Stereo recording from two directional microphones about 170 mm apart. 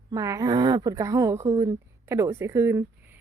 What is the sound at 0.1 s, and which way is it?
A woman's voice, 20° right (ahead or behind).